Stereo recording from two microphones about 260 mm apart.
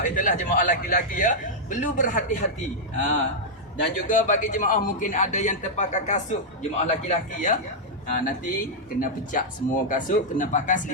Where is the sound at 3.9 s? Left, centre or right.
Left.